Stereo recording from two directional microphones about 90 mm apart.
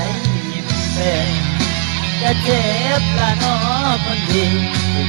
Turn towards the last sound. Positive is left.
turn(degrees=50)  # may be behind; listen again after turning